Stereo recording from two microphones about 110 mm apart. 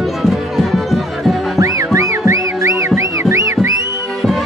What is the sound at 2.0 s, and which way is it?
Music, 30° right (ahead or behind).